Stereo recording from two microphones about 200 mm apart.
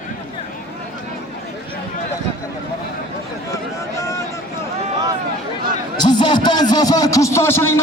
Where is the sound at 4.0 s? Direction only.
15° left (ahead or behind).